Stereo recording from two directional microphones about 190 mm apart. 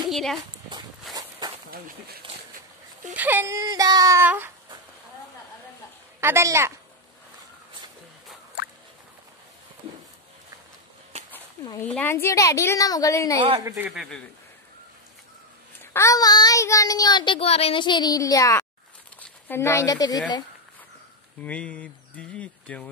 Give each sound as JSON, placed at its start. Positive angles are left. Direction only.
{"t": 0.1, "sound": "speech", "side_deg": 0}
{"t": 1.1, "sound": "a sound", "side_deg": 0}
{"t": 3.2, "sound": "speech", "side_deg": -10}
{"t": 6.2, "sound": "speech", "side_deg": -15}
{"t": 11.1, "sound": "a sound", "side_deg": -35}
{"t": 11.8, "sound": "a woman's voice", "side_deg": 10}
{"t": 13.8, "sound": "speech", "side_deg": 0}
{"t": 15.8, "sound": "a child's voice", "side_deg": 15}
{"t": 21.4, "sound": "speech", "side_deg": 5}